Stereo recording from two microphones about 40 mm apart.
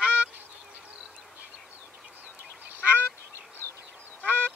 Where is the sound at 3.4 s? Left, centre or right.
Left.